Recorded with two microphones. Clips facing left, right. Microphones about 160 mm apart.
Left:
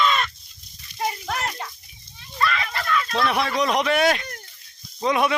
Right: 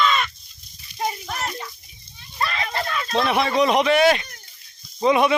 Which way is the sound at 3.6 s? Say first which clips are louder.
Right 4 dB; centre (ahead or behind).